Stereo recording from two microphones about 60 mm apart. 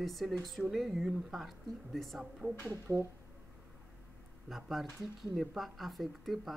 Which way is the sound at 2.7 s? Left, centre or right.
Right.